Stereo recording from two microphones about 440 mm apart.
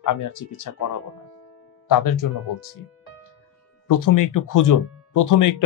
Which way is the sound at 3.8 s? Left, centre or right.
Left.